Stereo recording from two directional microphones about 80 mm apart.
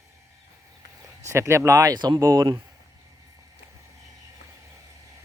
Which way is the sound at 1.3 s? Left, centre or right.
Right.